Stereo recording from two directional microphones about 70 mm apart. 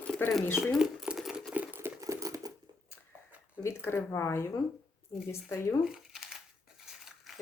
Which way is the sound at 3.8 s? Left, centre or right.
Left.